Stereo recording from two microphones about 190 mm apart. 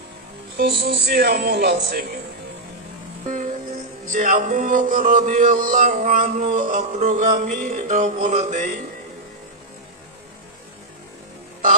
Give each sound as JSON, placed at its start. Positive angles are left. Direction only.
{"t": 0.5, "sound": "speech", "side_deg": -65}
{"t": 3.2, "sound": "music", "side_deg": -40}
{"t": 4.1, "sound": "speech", "side_deg": -45}
{"t": 8.2, "sound": "mantra", "side_deg": -40}